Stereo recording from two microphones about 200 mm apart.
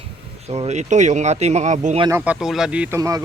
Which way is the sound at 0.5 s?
35° right (ahead or behind).